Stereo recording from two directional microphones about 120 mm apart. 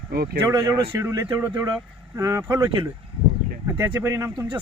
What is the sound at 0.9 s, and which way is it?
Speech, 25° right (ahead or behind).